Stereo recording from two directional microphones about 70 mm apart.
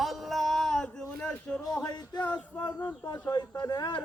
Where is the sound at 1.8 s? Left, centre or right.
Left.